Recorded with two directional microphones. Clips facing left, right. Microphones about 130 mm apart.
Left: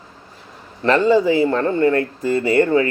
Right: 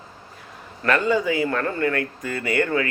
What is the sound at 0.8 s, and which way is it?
Speech, 30° left (ahead or behind).